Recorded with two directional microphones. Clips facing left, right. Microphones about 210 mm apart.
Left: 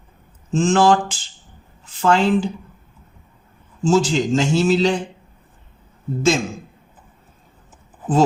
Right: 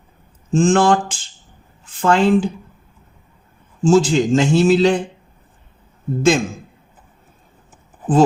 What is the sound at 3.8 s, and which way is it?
Speech, 50° right (ahead or behind).